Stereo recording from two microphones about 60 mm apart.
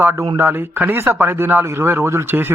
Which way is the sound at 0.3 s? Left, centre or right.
Right.